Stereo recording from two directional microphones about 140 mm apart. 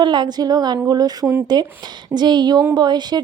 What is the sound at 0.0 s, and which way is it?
A woman's voice, 30° right (ahead or behind).